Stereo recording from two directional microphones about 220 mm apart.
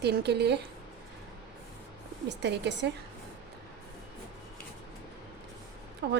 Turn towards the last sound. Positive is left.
turn(degrees=-50)  # may be behind; listen again after turning